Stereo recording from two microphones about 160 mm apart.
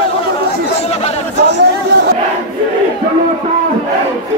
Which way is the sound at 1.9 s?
90° right.